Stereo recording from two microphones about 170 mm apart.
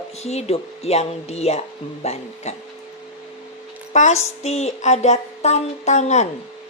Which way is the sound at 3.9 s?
45° left (ahead or behind).